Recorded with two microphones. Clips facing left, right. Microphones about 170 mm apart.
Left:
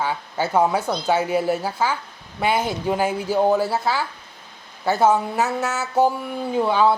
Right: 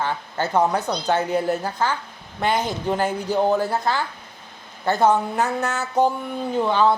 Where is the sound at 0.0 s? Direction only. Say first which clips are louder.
Left 1 dB; 10° left (ahead or behind).